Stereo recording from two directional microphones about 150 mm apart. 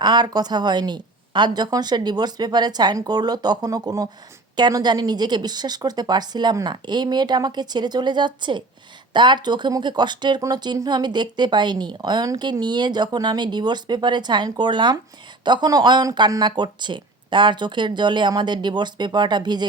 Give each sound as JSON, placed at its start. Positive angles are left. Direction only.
{"t": 0.0, "sound": "speech", "side_deg": -30}